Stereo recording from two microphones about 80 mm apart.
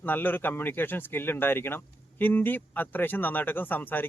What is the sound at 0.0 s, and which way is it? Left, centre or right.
Speech, left.